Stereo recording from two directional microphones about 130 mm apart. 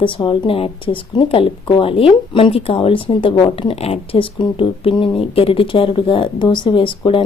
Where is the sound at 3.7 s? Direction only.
45° left (ahead or behind).